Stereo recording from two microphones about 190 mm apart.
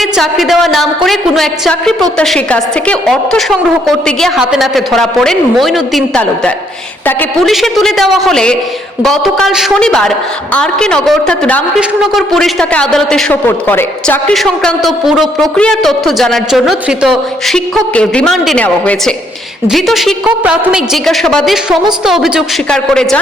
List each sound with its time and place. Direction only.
0.0 s a man's voice: centre (ahead or behind)